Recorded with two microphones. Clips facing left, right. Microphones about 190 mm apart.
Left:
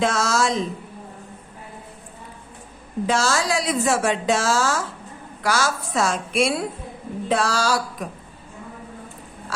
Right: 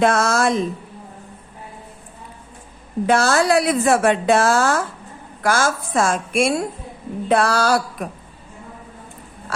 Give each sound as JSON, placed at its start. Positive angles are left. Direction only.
{"t": 0.0, "sound": "a woman's voice", "side_deg": -55}
{"t": 3.1, "sound": "a woman's voice", "side_deg": -60}